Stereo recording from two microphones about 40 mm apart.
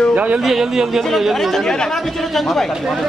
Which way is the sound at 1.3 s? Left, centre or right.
Centre.